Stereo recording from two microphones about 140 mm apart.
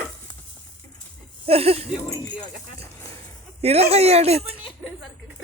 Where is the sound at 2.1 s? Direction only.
30° left (ahead or behind).